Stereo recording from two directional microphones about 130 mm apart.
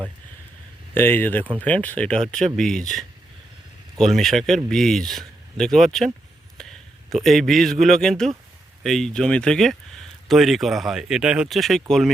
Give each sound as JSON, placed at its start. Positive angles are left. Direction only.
{"t": 0.9, "sound": "speech", "side_deg": 15}
{"t": 3.9, "sound": "speech", "side_deg": 5}
{"t": 7.1, "sound": "speech", "side_deg": 0}